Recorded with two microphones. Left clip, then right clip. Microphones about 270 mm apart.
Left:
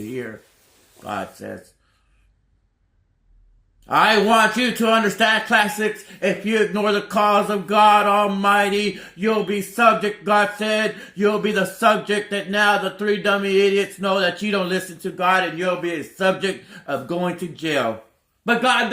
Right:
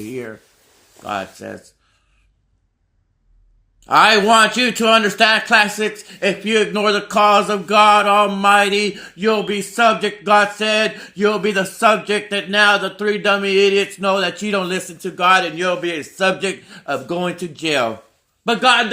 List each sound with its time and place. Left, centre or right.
1.0 s a man's voice: right
3.8 s a man's voice: right